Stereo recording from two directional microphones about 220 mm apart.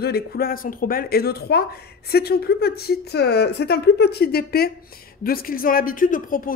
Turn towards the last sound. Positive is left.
turn(degrees=40)  # may be behind; listen again after turning